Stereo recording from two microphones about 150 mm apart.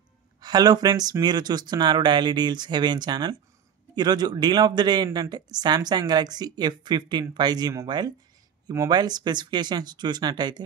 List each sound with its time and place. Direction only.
0.4 s speech: 25° right (ahead or behind)